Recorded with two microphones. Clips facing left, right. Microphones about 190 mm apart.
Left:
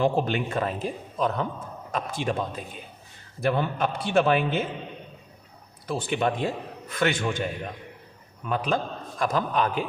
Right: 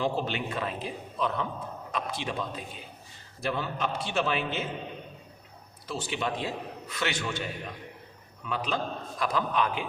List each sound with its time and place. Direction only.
0.0 s a man's voice: 50° left (ahead or behind)
3.4 s a man's voice: 55° left (ahead or behind)
5.9 s a man's voice: 55° left (ahead or behind)
8.4 s a man's voice: 50° left (ahead or behind)